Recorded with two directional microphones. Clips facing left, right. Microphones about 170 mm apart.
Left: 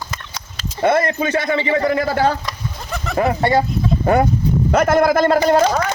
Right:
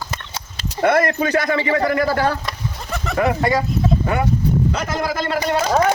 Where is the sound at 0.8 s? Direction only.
25° left (ahead or behind).